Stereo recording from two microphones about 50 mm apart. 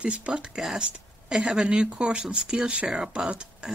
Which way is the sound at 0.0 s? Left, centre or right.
Right.